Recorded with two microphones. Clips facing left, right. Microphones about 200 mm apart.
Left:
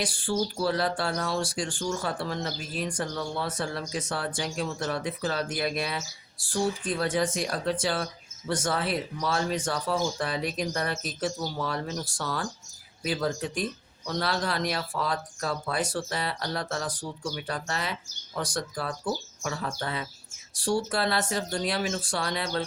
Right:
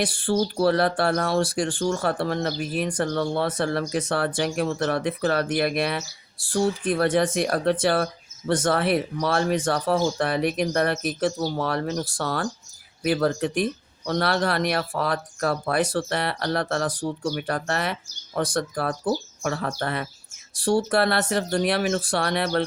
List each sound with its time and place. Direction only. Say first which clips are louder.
0.0 s speech: right 5 dB; 60° right (ahead or behind)